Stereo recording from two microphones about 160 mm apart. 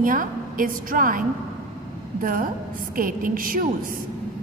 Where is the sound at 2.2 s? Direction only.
60° right (ahead or behind).